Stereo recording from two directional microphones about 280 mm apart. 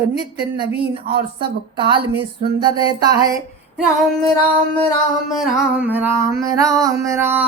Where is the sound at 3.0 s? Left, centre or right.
Centre.